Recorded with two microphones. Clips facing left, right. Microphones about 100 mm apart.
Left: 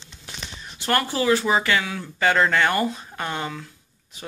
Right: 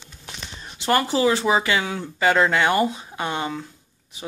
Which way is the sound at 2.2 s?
5° right (ahead or behind).